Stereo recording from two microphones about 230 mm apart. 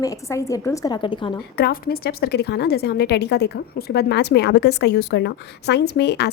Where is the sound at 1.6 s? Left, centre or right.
Left.